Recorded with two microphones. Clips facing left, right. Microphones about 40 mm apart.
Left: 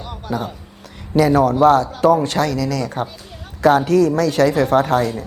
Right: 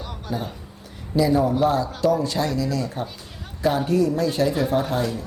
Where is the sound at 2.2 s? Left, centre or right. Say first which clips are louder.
Left 5 dB; left.